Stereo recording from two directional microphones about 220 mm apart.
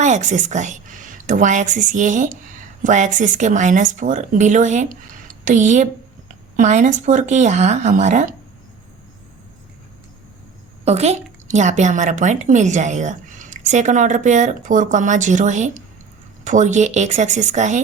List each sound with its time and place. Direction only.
0.0 s a woman's voice: 35° right (ahead or behind)
10.8 s a woman's voice: 30° right (ahead or behind)